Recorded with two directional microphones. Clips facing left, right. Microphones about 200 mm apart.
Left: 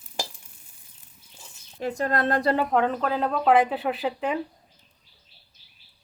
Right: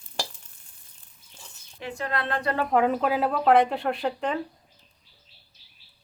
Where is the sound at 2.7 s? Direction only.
5° right (ahead or behind).